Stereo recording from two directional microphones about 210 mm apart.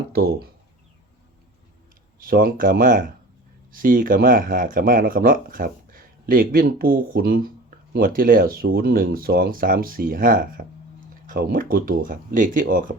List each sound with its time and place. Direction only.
0.1 s speech: 45° right (ahead or behind)
2.1 s speech: 45° right (ahead or behind)